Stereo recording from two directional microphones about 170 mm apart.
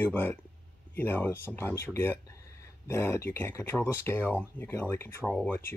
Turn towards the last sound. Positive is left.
turn(degrees=5)  # may be behind; listen again after turning